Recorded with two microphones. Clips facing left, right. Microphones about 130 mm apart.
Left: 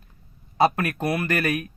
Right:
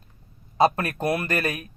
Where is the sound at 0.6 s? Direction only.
30° right (ahead or behind).